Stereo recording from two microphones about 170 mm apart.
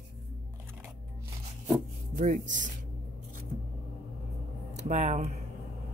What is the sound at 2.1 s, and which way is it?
Speech, 50° right (ahead or behind).